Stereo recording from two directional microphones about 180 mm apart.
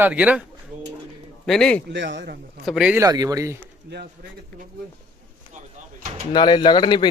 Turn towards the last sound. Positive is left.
turn(degrees=25)  # may be behind; listen again after turning